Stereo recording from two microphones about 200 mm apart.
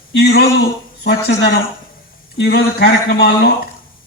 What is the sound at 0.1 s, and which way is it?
A man's voice, 60° left (ahead or behind).